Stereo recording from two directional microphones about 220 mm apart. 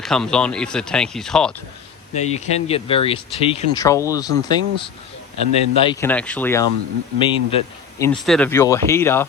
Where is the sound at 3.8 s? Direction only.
15° left (ahead or behind).